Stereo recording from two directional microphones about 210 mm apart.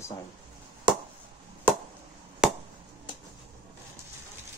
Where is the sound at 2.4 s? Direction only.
5° right (ahead or behind).